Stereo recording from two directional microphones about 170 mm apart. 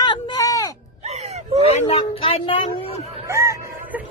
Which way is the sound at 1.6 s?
35° left (ahead or behind).